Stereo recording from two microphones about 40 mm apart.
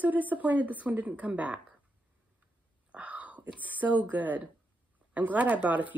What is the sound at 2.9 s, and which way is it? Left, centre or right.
Whispering, right.